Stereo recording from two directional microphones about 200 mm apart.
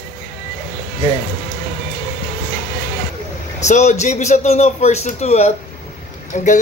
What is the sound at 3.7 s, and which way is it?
A man's voice, 35° left (ahead or behind).